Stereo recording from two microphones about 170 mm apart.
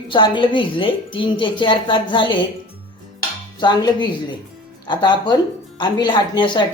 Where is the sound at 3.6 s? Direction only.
25° left (ahead or behind).